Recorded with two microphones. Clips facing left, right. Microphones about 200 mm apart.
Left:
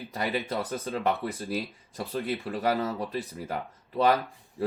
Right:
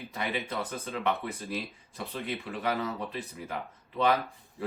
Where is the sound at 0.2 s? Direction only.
35° left (ahead or behind).